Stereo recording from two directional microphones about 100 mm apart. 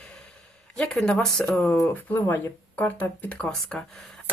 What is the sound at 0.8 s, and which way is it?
Speech, 5° left (ahead or behind).